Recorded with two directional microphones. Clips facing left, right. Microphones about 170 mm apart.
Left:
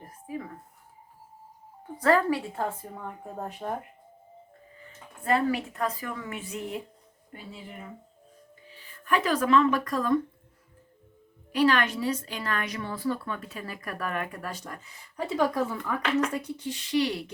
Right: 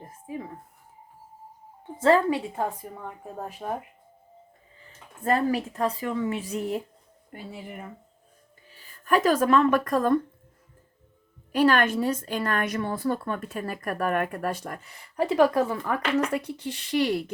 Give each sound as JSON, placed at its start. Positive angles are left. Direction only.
{"t": 0.0, "sound": "a sound", "side_deg": -25}
{"t": 2.0, "sound": "speech", "side_deg": -25}
{"t": 3.6, "sound": "speech", "side_deg": -5}
{"t": 5.2, "sound": "a woman's voice", "side_deg": -40}
{"t": 8.7, "sound": "speech", "side_deg": -40}
{"t": 11.5, "sound": "a woman's voice", "side_deg": -50}